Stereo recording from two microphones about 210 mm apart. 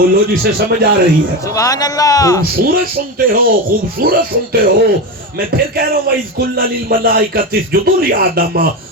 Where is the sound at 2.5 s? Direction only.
45° right (ahead or behind).